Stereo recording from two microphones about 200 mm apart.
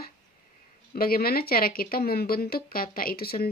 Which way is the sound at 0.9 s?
50° left (ahead or behind).